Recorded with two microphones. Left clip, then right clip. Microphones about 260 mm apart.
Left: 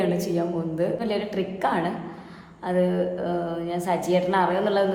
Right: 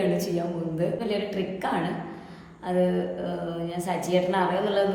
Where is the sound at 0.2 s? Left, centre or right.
Centre.